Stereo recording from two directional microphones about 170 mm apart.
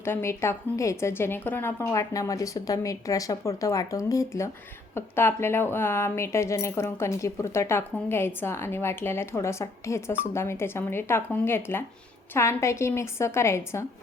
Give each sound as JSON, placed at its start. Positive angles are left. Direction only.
{"t": 0.0, "sound": "a woman's voice", "side_deg": 15}